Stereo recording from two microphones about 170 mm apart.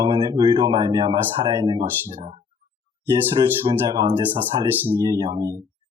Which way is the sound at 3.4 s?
25° right (ahead or behind).